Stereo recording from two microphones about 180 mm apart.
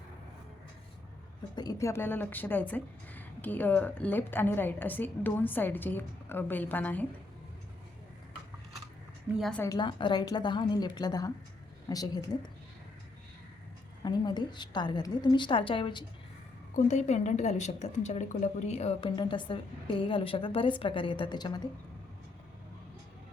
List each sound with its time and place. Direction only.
1.5 s speech: 20° left (ahead or behind)
9.3 s a woman's voice: 5° left (ahead or behind)
9.6 s a woman's voice: 25° left (ahead or behind)
14.0 s a woman's voice: 25° left (ahead or behind)
16.7 s a woman's voice: 40° left (ahead or behind); by 21.7 s 25° left (ahead or behind)